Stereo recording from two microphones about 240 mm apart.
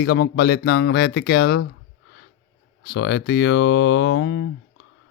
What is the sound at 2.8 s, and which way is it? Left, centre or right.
Speech, left.